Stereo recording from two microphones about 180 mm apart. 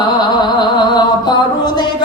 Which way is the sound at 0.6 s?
25° left (ahead or behind).